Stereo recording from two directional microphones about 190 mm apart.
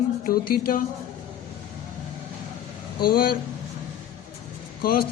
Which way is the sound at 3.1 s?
50° left (ahead or behind).